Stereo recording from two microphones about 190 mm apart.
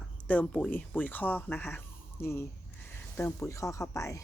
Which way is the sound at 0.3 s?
5° left (ahead or behind).